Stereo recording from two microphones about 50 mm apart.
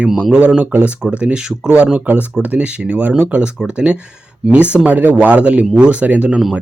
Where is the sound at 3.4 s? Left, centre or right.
Centre.